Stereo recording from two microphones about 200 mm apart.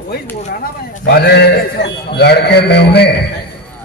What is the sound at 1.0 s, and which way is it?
A man's voice, 55° left (ahead or behind).